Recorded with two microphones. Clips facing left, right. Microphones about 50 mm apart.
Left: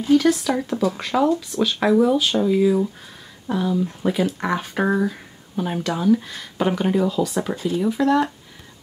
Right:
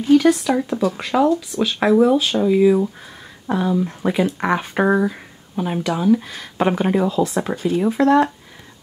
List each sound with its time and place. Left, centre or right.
0.2 s speech: centre
3.4 s speech: right
4.2 s speech: right
6.6 s speech: right
7.8 s speech: right